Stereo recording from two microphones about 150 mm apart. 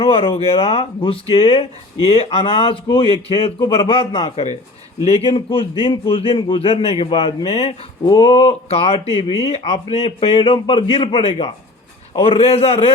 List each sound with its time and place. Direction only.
0.0 s speech: 40° left (ahead or behind)
9.0 s speech: 25° right (ahead or behind)
9.4 s speech: 45° left (ahead or behind)